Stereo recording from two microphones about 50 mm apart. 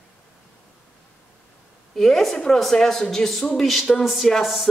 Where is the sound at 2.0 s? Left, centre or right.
Centre.